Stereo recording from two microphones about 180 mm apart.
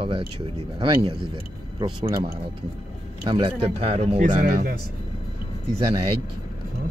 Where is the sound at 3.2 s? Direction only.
30° right (ahead or behind).